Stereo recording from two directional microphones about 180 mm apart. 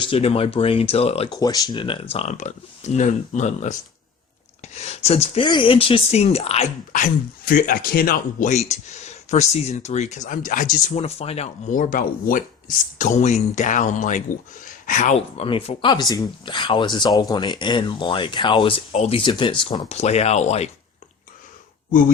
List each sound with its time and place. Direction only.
0.0 s speech: 30° left (ahead or behind)
1.4 s speech: 20° left (ahead or behind)
2.1 s speech: 40° left (ahead or behind)
15.4 s speech: 30° left (ahead or behind)